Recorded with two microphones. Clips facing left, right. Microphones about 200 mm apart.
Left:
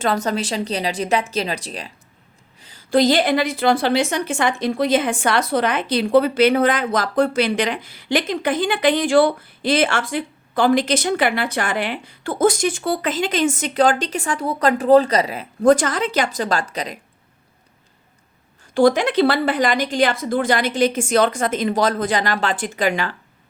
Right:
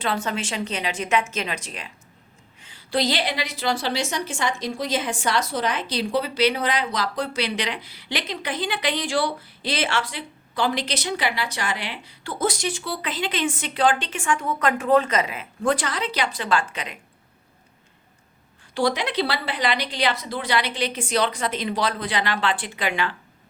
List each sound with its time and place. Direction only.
0.0 s a woman's voice: 40° left (ahead or behind)
18.7 s a woman's voice: 50° left (ahead or behind)